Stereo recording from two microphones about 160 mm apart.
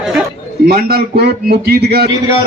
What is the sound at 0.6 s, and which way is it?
Speech, 80° right.